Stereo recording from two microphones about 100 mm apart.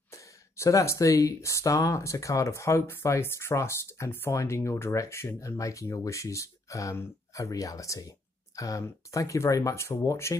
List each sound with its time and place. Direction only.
0.1 s speech: 30° left (ahead or behind)